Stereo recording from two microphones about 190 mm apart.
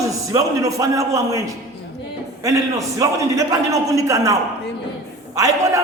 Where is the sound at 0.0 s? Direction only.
15° right (ahead or behind).